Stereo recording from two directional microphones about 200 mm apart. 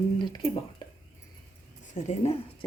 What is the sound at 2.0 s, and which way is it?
Female singing, 30° left (ahead or behind).